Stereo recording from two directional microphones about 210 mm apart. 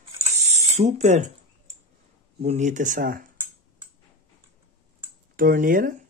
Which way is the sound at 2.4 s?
35° right (ahead or behind).